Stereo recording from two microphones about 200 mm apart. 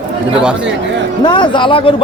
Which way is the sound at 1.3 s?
25° left (ahead or behind).